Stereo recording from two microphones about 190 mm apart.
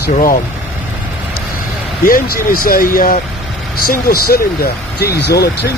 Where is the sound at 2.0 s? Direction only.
50° left (ahead or behind).